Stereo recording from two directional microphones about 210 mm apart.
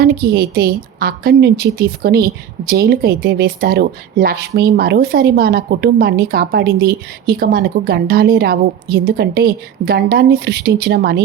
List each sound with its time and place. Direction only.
0.0 s a woman's voice: 45° right (ahead or behind)